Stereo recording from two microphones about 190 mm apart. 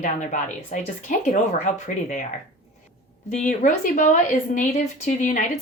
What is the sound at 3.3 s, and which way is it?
A woman's voice, 40° left (ahead or behind).